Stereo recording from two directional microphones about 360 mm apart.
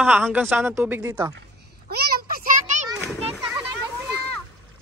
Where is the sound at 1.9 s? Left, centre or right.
Right.